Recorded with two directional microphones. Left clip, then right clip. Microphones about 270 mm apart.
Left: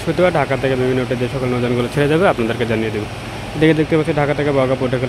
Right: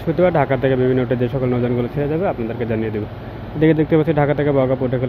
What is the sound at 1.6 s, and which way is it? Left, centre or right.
Speech, centre.